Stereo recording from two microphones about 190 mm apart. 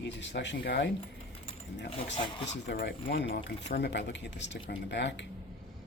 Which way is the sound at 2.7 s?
60° left (ahead or behind).